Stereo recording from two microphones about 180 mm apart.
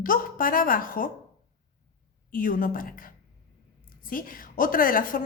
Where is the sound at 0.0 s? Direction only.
50° left (ahead or behind).